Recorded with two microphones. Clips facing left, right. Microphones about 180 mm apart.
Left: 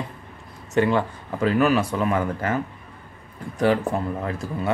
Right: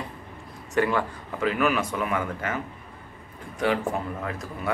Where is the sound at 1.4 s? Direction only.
35° left (ahead or behind).